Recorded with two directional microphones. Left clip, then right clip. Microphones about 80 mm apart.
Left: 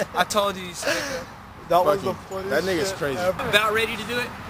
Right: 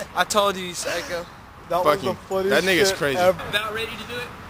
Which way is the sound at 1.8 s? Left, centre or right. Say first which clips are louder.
Right 2 dB; centre.